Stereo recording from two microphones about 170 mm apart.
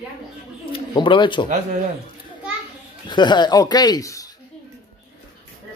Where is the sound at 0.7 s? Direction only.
30° left (ahead or behind).